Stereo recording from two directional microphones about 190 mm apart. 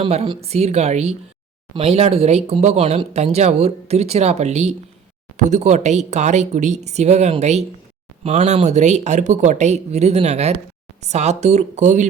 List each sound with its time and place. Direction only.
0.0 s speech: 30° right (ahead or behind)